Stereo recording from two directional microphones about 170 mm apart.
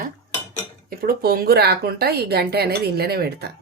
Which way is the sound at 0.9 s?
65° right (ahead or behind).